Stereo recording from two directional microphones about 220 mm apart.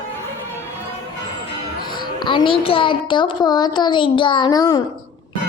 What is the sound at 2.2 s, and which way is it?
A woman's voice, 20° left (ahead or behind).